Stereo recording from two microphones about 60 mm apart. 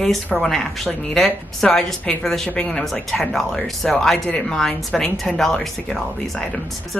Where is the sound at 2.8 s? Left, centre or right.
Centre.